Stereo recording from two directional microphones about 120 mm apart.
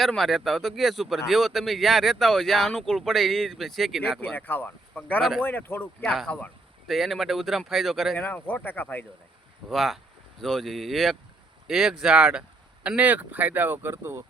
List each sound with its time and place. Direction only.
0.0 s speech: centre (ahead or behind)
4.2 s speech: 15° left (ahead or behind)
6.8 s speech: centre (ahead or behind)
9.6 s speech: centre (ahead or behind); by 14.3 s 20° right (ahead or behind)